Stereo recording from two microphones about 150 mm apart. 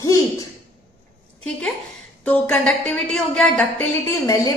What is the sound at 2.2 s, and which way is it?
A woman's voice, 10° left (ahead or behind).